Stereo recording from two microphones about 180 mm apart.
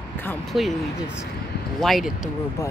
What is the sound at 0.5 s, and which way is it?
Speech, centre (ahead or behind).